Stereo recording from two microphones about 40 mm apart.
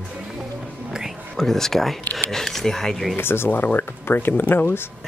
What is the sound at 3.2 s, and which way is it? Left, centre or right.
Speech, left.